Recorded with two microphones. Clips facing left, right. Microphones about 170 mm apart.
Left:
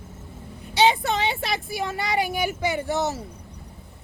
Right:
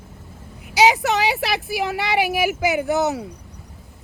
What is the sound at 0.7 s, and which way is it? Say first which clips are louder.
Speech: right 3 dB; 75° right (ahead or behind).